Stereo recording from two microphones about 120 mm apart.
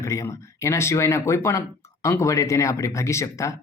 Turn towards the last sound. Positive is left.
turn(degrees=25)  # may be behind; listen again after turning